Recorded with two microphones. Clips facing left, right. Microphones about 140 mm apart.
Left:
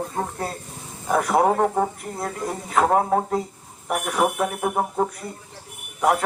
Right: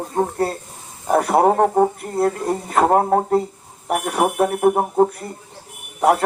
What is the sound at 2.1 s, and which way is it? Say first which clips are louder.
Speech: right 9 dB; 60° right (ahead or behind).